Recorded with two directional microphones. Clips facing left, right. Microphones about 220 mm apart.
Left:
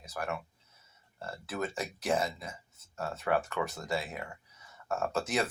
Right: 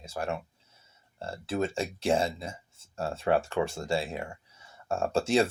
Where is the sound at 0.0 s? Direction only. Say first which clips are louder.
Right 4 dB; 25° right (ahead or behind).